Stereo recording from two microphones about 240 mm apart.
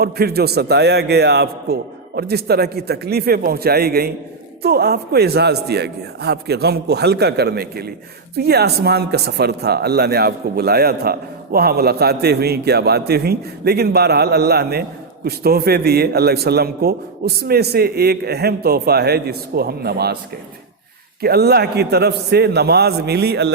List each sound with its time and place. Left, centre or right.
0.0 s speech: right
21.2 s a man's voice: right